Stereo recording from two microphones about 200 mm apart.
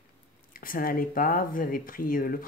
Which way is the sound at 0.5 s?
45° left (ahead or behind).